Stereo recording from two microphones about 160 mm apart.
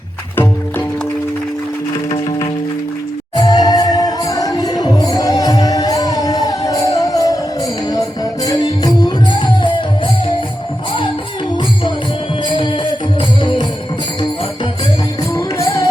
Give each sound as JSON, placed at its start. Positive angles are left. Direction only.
{"t": 3.3, "sound": "music", "side_deg": 25}
{"t": 12.5, "sound": "music", "side_deg": 30}
{"t": 15.3, "sound": "music", "side_deg": 20}